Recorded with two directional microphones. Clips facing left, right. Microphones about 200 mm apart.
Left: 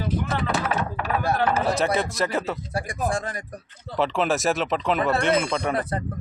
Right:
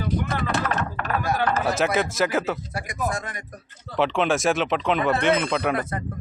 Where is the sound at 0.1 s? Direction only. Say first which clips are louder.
Even; 5° left (ahead or behind).